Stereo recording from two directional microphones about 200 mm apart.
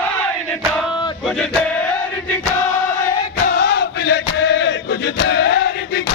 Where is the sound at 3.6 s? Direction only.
55° left (ahead or behind).